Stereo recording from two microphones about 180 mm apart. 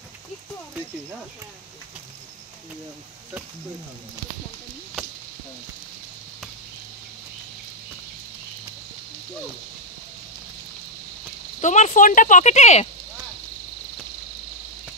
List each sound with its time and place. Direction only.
11.6 s speech: 40° left (ahead or behind)